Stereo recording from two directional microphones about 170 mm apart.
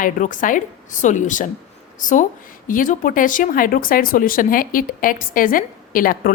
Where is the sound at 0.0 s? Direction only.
50° left (ahead or behind).